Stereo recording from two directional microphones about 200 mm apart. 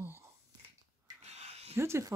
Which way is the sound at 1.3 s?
30° right (ahead or behind).